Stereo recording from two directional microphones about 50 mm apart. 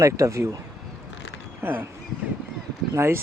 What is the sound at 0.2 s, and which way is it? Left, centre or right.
Speech, right.